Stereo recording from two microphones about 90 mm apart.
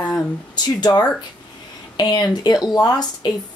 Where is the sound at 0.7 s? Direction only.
50° left (ahead or behind).